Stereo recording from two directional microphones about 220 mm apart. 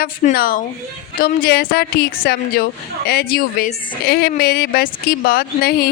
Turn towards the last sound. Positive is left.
turn(degrees=40)  # may be behind; listen again after turning